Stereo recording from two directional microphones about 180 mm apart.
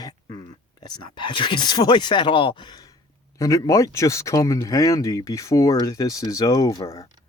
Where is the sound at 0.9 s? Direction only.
25° left (ahead or behind).